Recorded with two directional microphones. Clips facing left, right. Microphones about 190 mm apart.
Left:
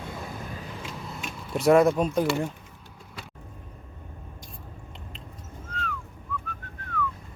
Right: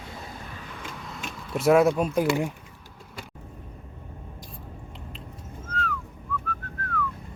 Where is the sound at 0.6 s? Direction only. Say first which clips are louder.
Left 2 dB; 30° left (ahead or behind).